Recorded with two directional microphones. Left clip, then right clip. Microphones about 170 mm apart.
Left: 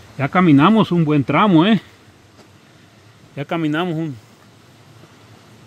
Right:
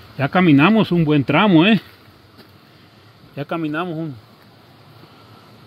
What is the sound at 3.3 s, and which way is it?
Speech, 20° left (ahead or behind).